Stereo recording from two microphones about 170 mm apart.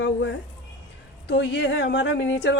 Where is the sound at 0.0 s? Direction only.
90° left.